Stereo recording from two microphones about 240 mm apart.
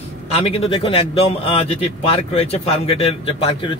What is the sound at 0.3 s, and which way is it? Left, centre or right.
A man's voice, left.